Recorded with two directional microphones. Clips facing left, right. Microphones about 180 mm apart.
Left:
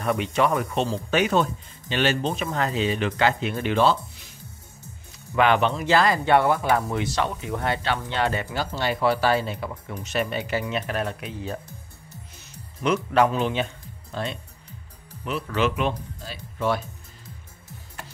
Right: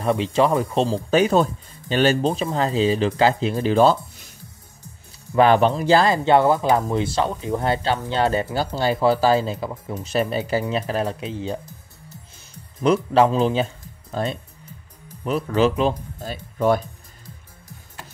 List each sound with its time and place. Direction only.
0.0 s speech: 30° right (ahead or behind)
5.3 s speech: 35° right (ahead or behind)
12.8 s speech: 35° right (ahead or behind)
16.2 s speech: 45° right (ahead or behind)